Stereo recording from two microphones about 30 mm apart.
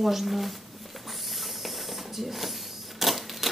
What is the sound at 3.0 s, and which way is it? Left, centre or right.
Camera, centre.